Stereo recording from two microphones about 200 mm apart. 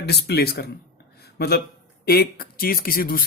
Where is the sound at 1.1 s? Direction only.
50° left (ahead or behind).